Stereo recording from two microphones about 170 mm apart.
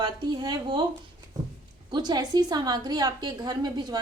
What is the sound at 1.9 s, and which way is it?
A woman's voice, 25° right (ahead or behind).